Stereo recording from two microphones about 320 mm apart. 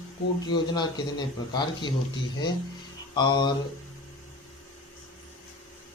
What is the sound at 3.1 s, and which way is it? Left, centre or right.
Speech, centre.